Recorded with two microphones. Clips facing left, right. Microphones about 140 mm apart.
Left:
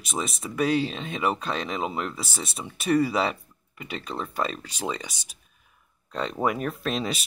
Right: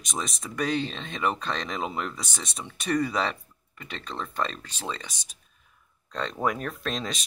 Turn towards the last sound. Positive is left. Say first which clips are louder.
# left 4 dB
turn(degrees=5)  # may be behind; listen again after turning